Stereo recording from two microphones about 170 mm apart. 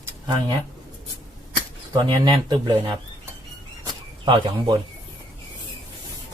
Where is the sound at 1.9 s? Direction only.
25° right (ahead or behind).